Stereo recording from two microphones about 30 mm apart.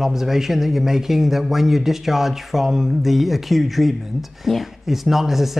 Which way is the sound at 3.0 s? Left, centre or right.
Centre.